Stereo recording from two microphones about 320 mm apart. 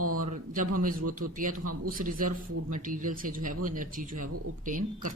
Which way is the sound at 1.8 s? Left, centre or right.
Right.